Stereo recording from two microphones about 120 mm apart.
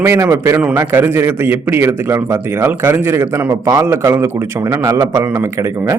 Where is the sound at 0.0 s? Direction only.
20° right (ahead or behind).